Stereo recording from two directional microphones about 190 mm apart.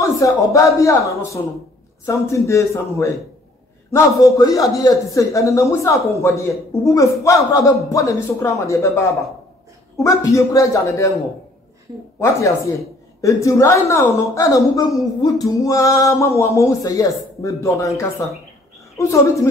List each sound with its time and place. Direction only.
0.0 s a man's voice: 15° left (ahead or behind)
12.2 s a man's voice: 15° left (ahead or behind)